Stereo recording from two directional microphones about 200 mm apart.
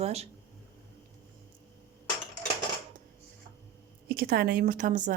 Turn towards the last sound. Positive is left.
turn(degrees=-40)  # may be behind; listen again after turning